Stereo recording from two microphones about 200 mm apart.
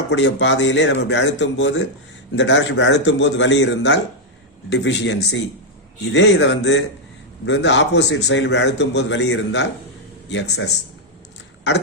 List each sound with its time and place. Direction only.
0.1 s a man's voice: 65° left (ahead or behind)